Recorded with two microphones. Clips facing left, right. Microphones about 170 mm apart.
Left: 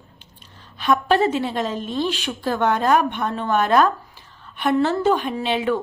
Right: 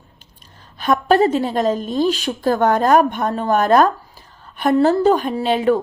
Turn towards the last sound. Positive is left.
turn(degrees=-40)  # may be behind; listen again after turning